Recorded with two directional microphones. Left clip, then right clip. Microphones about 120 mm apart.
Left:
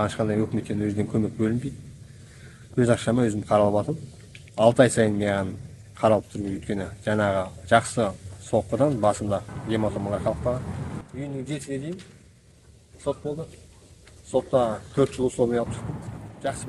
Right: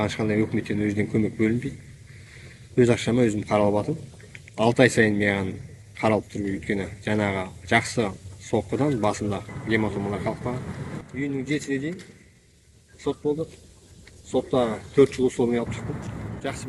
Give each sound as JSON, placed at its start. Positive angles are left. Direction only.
{"t": 0.0, "sound": "speech", "side_deg": 30}
{"t": 2.7, "sound": "a man's voice", "side_deg": 30}
{"t": 11.2, "sound": "speech", "side_deg": 45}
{"t": 14.3, "sound": "speech", "side_deg": 35}
{"t": 16.4, "sound": "speech", "side_deg": 55}